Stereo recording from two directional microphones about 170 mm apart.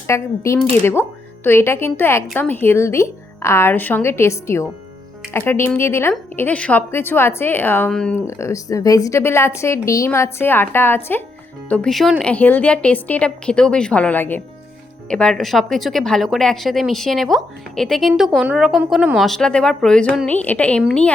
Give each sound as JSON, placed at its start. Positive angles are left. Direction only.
{"t": 0.1, "sound": "speech", "side_deg": 15}
{"t": 8.3, "sound": "a woman's voice", "side_deg": 15}